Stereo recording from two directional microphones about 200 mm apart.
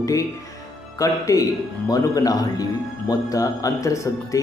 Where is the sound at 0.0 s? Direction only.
15° left (ahead or behind).